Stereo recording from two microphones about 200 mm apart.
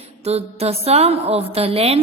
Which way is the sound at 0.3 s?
30° right (ahead or behind).